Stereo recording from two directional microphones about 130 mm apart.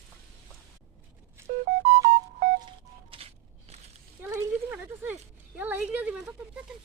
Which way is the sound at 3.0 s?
50° right (ahead or behind).